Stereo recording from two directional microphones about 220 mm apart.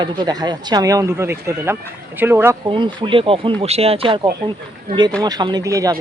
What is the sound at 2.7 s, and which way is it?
Speech, 20° right (ahead or behind).